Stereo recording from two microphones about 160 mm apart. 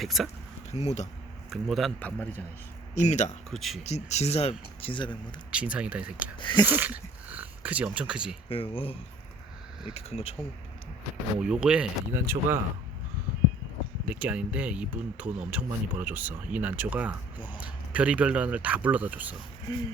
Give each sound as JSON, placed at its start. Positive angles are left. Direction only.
{"t": 0.0, "sound": "speech", "side_deg": 0}
{"t": 0.7, "sound": "speech", "side_deg": 45}
{"t": 1.5, "sound": "speech", "side_deg": 0}
{"t": 2.9, "sound": "speech", "side_deg": 45}
{"t": 3.5, "sound": "speech", "side_deg": 0}
{"t": 3.8, "sound": "speech", "side_deg": 45}
{"t": 5.5, "sound": "speech", "side_deg": -5}
{"t": 6.4, "sound": "a sound", "side_deg": 30}
{"t": 6.7, "sound": "speech", "side_deg": -10}
{"t": 8.4, "sound": "speech", "side_deg": 35}
{"t": 11.3, "sound": "speech", "side_deg": -5}
{"t": 14.0, "sound": "speech", "side_deg": -10}